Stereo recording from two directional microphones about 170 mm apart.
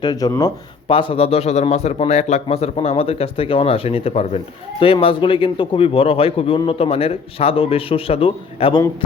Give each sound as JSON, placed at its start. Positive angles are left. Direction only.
{"t": 0.0, "sound": "speech", "side_deg": 25}